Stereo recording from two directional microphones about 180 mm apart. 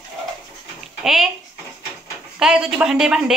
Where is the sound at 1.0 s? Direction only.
Centre (ahead or behind).